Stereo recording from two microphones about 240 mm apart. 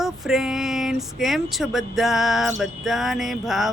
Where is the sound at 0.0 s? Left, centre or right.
Centre.